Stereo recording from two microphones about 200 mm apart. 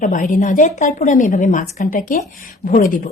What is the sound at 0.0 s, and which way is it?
A woman's voice, 40° left (ahead or behind).